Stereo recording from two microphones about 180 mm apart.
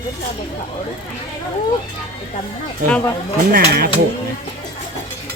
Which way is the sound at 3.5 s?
60° right (ahead or behind).